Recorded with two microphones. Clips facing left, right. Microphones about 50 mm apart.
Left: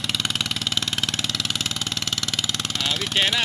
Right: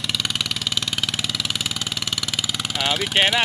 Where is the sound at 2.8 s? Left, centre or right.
Right.